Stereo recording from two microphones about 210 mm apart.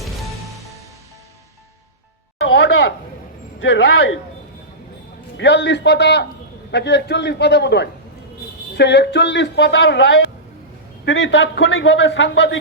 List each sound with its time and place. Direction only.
0.0 s music: centre (ahead or behind)
2.4 s chopping: 65° left (ahead or behind)
3.6 s a man's voice: 65° left (ahead or behind)
5.4 s a man's voice: 55° left (ahead or behind)